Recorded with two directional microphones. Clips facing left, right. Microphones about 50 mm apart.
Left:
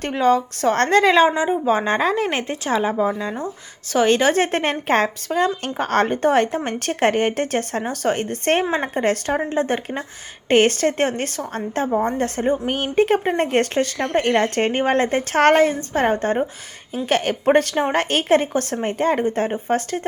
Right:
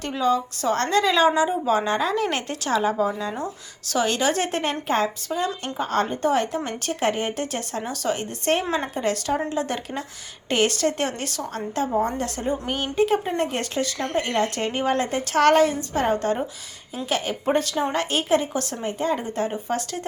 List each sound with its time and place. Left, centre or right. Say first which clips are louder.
0.0 s a woman's voice: left 5 dB; left
1.3 s a woman's voice: left 2 dB; left
3.9 s a woman's voice: left 6 dB; left
11.9 s a woman's voice: left 3 dB; left
12.1 s a woman's voice: left 5 dB; left
17.1 s a woman's voice: left 6 dB; left